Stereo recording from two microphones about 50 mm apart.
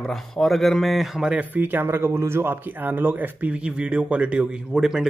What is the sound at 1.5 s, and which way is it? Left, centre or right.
Speech, right.